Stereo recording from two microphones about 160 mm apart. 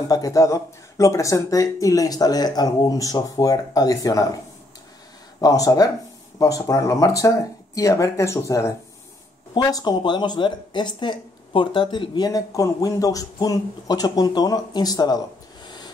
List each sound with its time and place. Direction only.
0.1 s speech: 20° left (ahead or behind)
5.4 s speech: 20° left (ahead or behind)